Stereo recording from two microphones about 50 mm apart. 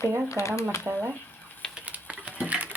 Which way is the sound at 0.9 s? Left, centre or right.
Right.